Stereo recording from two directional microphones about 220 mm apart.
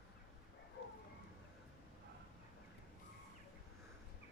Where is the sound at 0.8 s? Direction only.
50° left (ahead or behind).